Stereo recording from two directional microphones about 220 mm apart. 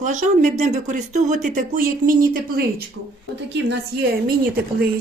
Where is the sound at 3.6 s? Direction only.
45° right (ahead or behind).